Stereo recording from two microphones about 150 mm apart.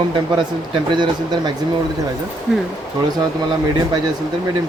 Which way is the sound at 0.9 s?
30° right (ahead or behind).